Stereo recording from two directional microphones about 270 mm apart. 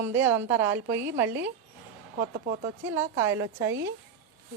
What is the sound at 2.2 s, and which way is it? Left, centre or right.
Speech, right.